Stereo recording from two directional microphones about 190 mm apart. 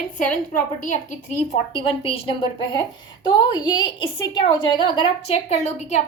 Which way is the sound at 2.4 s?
25° left (ahead or behind).